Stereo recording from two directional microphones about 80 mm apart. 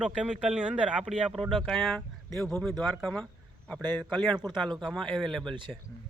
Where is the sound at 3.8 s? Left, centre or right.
Right.